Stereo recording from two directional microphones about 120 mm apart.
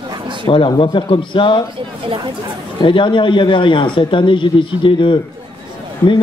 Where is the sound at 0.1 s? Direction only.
40° right (ahead or behind).